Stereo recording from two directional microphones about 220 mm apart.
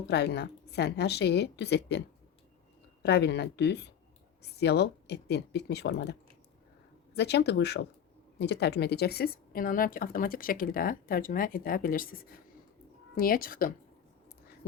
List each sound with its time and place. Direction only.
0.0 s a woman's voice: 50° left (ahead or behind)
7.2 s a woman's voice: 50° left (ahead or behind)